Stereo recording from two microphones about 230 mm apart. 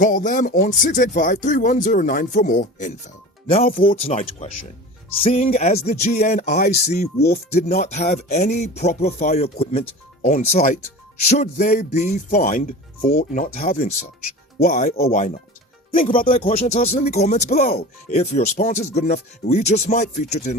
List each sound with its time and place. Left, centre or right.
0.0 s speech: left
16.2 s speech: left